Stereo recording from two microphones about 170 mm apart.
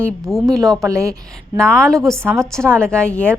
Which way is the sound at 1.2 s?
5° left (ahead or behind).